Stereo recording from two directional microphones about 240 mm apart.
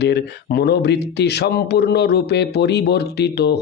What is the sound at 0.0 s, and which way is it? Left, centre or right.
Speech, left.